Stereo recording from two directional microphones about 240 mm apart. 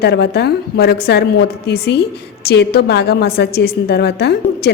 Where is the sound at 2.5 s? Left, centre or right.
Left.